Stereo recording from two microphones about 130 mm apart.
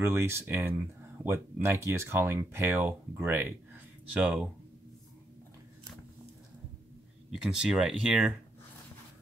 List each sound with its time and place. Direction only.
0.0 s speech: 20° right (ahead or behind)
7.2 s speech: 5° right (ahead or behind)